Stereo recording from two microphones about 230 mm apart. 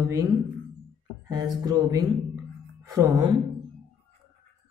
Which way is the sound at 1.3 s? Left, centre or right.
Centre.